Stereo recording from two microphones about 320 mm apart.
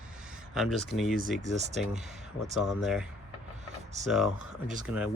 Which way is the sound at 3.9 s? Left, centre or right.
Right.